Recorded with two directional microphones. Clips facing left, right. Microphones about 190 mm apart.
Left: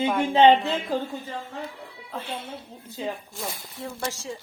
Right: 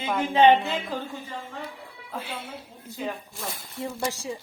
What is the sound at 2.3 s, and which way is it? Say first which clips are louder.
Speech: left 2 dB; 25° left (ahead or behind).